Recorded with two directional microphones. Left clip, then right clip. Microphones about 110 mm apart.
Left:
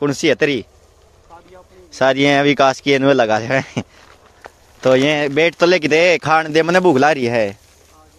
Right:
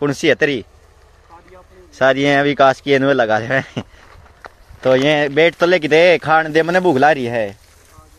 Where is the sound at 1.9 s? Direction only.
35° left (ahead or behind).